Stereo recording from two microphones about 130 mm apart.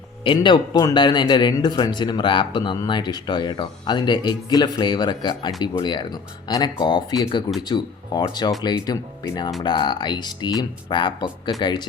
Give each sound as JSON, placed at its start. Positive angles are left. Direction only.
{"t": 0.3, "sound": "a man's voice", "side_deg": 40}